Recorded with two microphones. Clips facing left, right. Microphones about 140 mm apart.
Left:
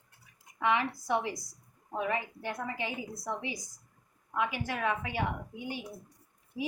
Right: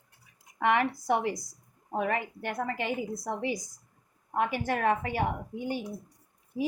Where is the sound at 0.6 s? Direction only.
60° right (ahead or behind).